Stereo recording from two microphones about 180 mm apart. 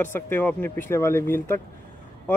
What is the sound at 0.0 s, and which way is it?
Speech, 10° left (ahead or behind).